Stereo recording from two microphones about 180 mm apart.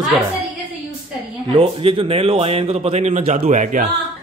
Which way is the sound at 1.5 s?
30° right (ahead or behind).